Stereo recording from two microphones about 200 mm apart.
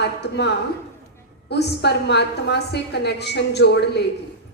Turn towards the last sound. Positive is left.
turn(degrees=55)  # may be behind; listen again after turning